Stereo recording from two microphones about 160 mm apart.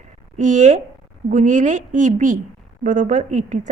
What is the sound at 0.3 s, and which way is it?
A woman's voice, 50° right (ahead or behind).